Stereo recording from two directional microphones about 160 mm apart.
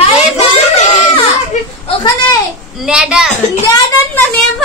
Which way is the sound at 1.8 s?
30° left (ahead or behind).